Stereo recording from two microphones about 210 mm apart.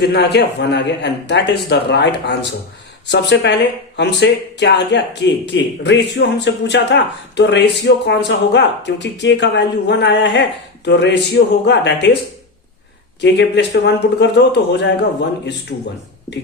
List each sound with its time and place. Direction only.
0.1 s a man's voice: 55° left (ahead or behind)
13.2 s speech: 55° left (ahead or behind)